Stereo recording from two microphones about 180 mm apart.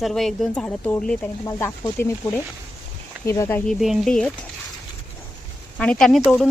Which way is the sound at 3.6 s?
Centre (ahead or behind).